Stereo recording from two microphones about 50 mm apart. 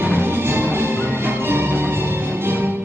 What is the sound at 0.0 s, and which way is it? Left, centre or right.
Music, right.